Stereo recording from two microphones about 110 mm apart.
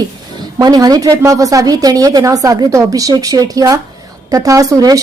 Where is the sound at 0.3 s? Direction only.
35° right (ahead or behind).